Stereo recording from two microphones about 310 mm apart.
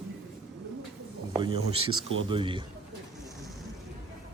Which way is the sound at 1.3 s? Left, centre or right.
Centre.